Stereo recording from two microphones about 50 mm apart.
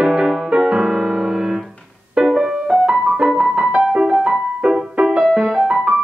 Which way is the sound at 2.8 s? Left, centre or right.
Centre.